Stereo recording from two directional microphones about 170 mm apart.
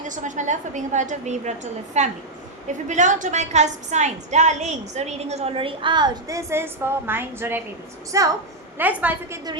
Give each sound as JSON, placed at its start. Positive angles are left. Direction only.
{"t": 0.0, "sound": "a woman's voice", "side_deg": -45}